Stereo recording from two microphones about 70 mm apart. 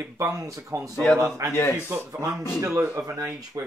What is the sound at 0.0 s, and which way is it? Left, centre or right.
Speech, right.